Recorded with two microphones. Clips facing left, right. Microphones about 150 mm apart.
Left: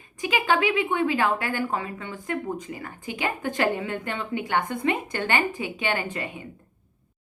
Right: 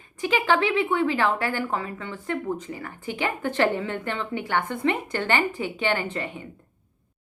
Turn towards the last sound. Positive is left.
turn(degrees=15)  # may be behind; listen again after turning